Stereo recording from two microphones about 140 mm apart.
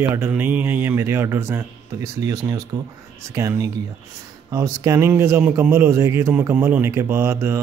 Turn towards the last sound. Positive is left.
turn(degrees=-20)  # may be behind; listen again after turning